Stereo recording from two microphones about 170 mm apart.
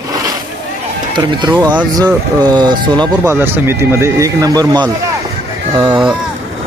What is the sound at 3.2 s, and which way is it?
Speech, 15° right (ahead or behind).